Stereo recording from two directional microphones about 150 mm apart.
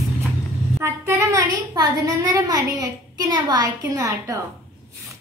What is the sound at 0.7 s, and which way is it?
A woman's voice, 20° right (ahead or behind).